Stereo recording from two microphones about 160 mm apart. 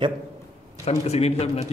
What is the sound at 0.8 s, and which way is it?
Speech, 40° left (ahead or behind).